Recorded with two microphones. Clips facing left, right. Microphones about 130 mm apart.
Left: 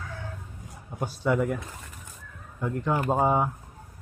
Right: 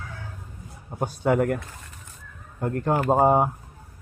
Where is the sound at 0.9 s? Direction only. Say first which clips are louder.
Right 4 dB; 55° right (ahead or behind).